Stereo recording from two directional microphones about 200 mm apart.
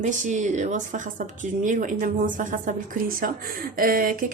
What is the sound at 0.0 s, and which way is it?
Speech, 40° right (ahead or behind).